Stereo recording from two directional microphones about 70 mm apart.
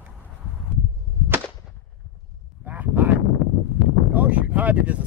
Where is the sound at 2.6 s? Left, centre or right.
Right.